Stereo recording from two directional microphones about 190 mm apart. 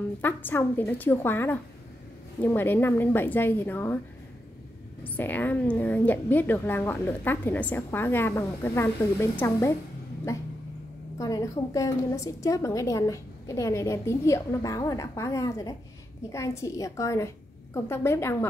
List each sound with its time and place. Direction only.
0.2 s a woman's voice: 10° left (ahead or behind)
5.0 s a woman's voice: 10° left (ahead or behind)
11.1 s a woman's voice: 20° left (ahead or behind)